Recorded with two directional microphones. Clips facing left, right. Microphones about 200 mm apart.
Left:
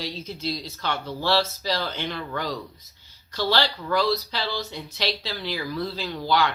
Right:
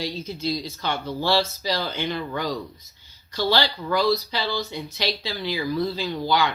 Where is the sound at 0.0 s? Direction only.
Centre (ahead or behind).